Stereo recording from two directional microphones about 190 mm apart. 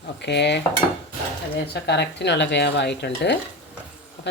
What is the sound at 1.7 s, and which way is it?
Speech, 65° left (ahead or behind).